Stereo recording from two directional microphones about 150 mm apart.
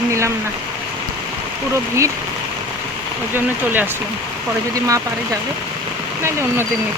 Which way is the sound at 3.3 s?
15° right (ahead or behind).